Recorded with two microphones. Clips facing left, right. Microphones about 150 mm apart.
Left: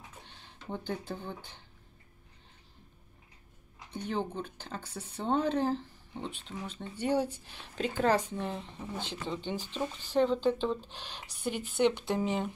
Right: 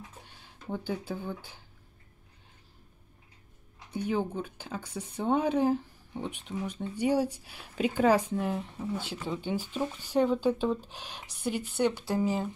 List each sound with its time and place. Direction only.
0.2 s speech: 10° right (ahead or behind)
3.9 s speech: 10° right (ahead or behind)